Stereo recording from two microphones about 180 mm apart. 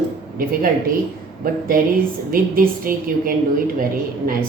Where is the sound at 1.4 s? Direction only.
55° right (ahead or behind).